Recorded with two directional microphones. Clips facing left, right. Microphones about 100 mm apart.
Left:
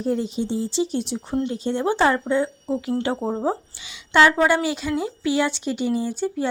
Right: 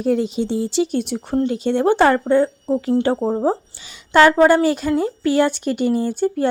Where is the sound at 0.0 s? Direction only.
80° right; by 2.2 s 55° right (ahead or behind).